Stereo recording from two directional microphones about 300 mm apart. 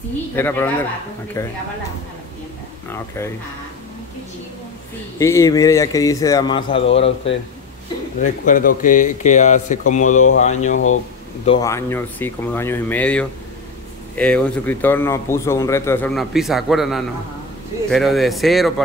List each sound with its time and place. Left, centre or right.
0.4 s speech: centre
5.2 s speech: centre